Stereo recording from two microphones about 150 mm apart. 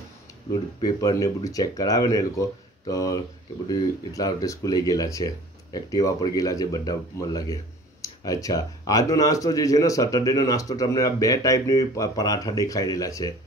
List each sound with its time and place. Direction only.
0.8 s speech: 25° left (ahead or behind)